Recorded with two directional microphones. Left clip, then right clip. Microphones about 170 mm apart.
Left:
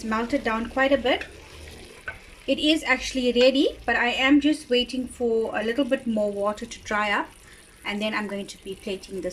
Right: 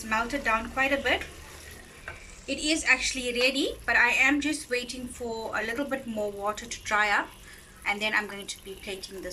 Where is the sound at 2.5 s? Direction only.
40° left (ahead or behind).